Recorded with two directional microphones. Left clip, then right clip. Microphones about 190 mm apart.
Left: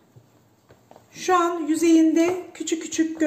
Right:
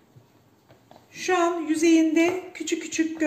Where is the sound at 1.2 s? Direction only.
45° left (ahead or behind).